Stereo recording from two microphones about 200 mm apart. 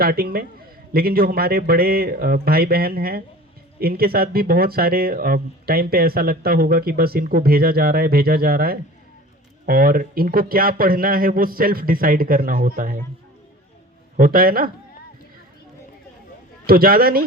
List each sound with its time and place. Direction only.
0.0 s speech: 50° right (ahead or behind)
14.2 s speech: 45° right (ahead or behind)
16.6 s speech: 45° right (ahead or behind)